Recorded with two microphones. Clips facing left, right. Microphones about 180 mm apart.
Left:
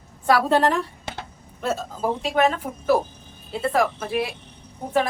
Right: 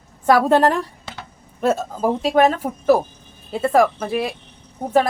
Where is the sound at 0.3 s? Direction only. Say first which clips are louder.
Right 4 dB; 45° right (ahead or behind).